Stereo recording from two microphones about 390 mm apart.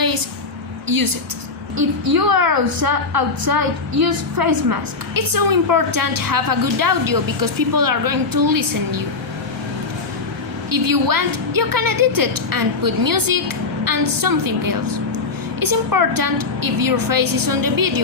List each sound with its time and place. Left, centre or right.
0.9 s a woman's voice: right
5.1 s a woman's voice: right
10.7 s a woman's voice: right